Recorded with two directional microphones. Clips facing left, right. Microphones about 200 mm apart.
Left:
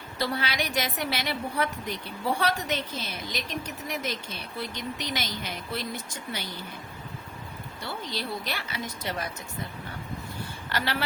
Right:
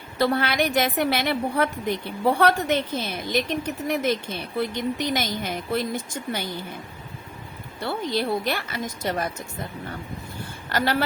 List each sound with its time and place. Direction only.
0.2 s a woman's voice: 55° right (ahead or behind)
7.8 s a woman's voice: 55° right (ahead or behind)
10.7 s a woman's voice: 45° right (ahead or behind)